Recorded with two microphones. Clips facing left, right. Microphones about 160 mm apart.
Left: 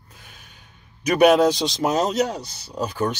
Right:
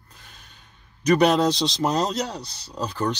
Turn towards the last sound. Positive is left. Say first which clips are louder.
# left 2 dB
turn(degrees=10)  # may be behind; listen again after turning